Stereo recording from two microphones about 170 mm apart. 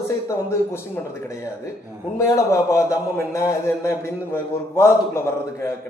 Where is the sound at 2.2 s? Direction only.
20° left (ahead or behind).